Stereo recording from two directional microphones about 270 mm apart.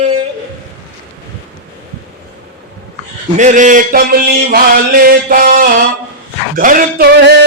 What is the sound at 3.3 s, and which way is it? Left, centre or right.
Mantra, right.